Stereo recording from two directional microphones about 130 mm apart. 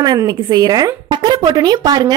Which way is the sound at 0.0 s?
30° right (ahead or behind).